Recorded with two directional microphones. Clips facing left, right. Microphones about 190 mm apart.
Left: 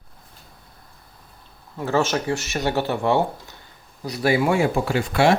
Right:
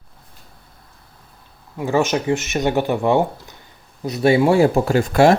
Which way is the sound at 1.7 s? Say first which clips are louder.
Right 3 dB; 15° right (ahead or behind).